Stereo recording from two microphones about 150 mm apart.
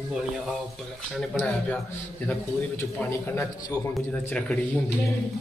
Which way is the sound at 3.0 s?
15° left (ahead or behind).